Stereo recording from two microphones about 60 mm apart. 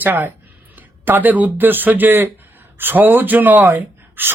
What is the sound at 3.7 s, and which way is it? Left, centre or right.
Gasp, right.